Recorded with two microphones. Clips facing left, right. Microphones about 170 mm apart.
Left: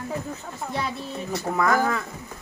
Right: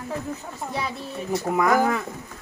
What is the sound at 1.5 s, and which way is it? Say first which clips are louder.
Speech: right 2 dB; 15° right (ahead or behind).